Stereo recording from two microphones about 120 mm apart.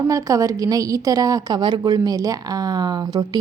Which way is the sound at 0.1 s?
25° right (ahead or behind).